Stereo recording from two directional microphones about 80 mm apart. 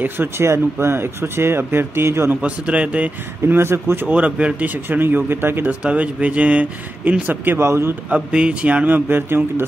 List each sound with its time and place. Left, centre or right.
0.0 s speech: right
2.4 s speech: centre
3.4 s speech: right
4.1 s speech: centre
5.9 s speech: centre
8.1 s speech: centre